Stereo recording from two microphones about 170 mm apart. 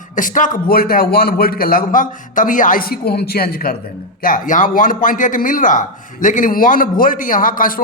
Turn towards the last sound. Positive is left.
turn(degrees=55)  # may be behind; listen again after turning